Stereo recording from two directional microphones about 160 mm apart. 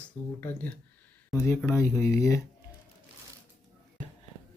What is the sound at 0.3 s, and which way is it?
Speech, 10° left (ahead or behind).